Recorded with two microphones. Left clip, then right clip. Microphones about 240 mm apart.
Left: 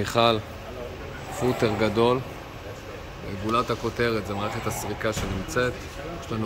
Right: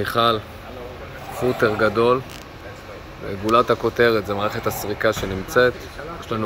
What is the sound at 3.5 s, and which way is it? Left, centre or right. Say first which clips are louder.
Speech: right 8 dB; centre.